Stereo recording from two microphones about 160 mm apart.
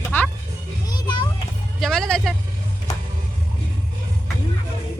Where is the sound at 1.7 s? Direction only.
5° left (ahead or behind).